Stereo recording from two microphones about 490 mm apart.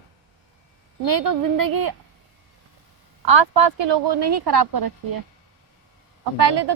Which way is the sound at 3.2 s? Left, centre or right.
Right.